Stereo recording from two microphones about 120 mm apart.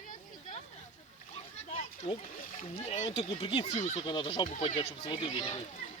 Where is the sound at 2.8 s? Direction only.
70° left (ahead or behind).